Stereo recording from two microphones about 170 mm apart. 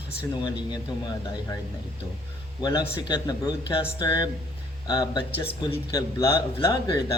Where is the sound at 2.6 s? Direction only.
25° left (ahead or behind).